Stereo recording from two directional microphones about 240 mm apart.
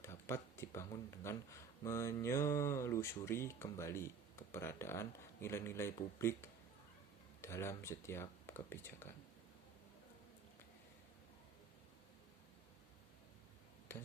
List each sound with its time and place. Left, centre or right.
0.0 s speech: centre